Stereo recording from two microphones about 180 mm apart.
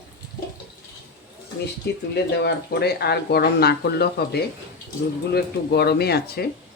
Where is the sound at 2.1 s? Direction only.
65° left (ahead or behind).